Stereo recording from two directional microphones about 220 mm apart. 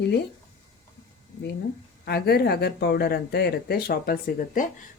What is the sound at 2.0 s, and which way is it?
Speech, 45° left (ahead or behind).